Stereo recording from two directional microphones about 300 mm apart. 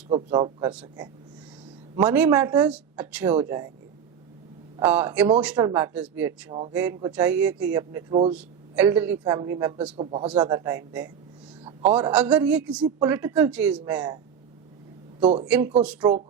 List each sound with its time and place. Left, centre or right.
0.1 s speech: centre
4.8 s a man's voice: centre
10.2 s a man's voice: centre
15.2 s speech: centre
15.4 s a man's voice: centre